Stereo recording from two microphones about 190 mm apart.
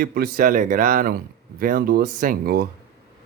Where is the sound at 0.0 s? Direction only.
50° right (ahead or behind).